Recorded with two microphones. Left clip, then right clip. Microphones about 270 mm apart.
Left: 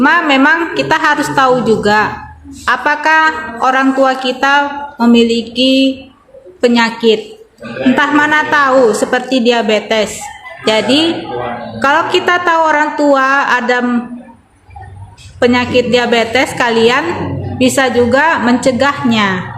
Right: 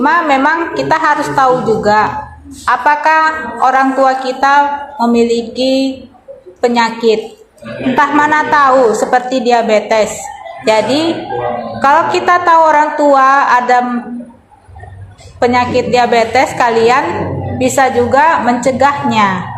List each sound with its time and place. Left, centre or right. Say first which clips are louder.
0.0 s a woman's voice: left 1 dB; left
15.4 s a man's voice: even; centre